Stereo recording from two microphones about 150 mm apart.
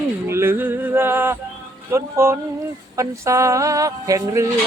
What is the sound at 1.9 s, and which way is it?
Speech, 20° right (ahead or behind).